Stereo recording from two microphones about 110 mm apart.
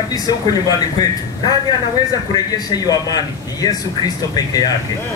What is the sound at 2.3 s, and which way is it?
A man's voice, 35° left (ahead or behind).